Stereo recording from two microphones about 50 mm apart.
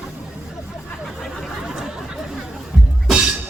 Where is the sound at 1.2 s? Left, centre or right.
Centre.